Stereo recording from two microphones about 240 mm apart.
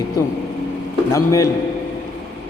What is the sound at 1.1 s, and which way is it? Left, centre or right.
Speech, centre.